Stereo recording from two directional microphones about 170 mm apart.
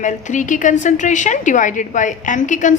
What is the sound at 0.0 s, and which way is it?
A woman's voice, 45° left (ahead or behind).